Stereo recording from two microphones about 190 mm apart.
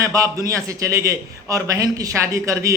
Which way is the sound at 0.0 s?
20° right (ahead or behind).